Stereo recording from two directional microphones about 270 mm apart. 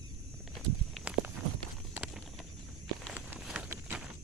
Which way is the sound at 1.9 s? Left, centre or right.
Centre.